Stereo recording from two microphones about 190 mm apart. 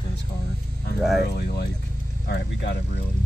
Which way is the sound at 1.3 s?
55° left (ahead or behind).